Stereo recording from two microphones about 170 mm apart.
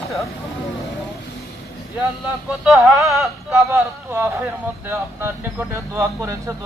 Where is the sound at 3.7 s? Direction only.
15° right (ahead or behind).